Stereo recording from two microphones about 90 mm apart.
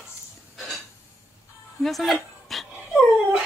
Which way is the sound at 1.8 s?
Centre (ahead or behind).